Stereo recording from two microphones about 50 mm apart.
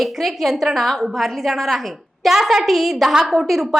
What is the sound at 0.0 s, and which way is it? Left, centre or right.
A woman's voice, centre.